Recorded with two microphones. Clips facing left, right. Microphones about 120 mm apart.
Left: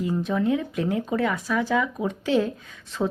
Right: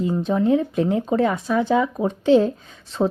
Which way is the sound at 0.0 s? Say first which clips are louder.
Right 4 dB; 30° right (ahead or behind).